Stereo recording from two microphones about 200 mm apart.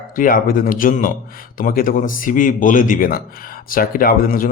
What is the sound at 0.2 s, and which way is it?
A man's voice, 45° left (ahead or behind).